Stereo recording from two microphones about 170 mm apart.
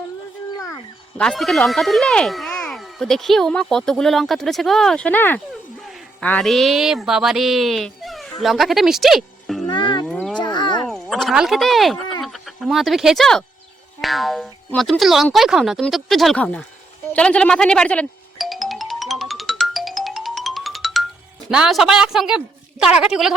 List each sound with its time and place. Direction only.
1.2 s speech: 5° left (ahead or behind)
9.6 s livestock: 25° left (ahead or behind)
10.1 s a sound: 5° left (ahead or behind)
10.4 s a sound: 25° left (ahead or behind)
10.8 s speech: centre (ahead or behind)
17.2 s music: 5° left (ahead or behind)
21.5 s speech: 5° right (ahead or behind)